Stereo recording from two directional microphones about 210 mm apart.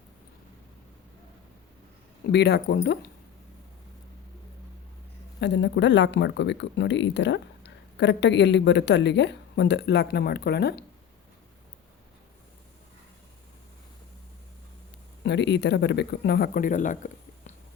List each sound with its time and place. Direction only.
2.2 s speech: 50° left (ahead or behind)
5.4 s speech: 55° left (ahead or behind)
15.2 s speech: 55° left (ahead or behind); by 17.5 s 35° left (ahead or behind)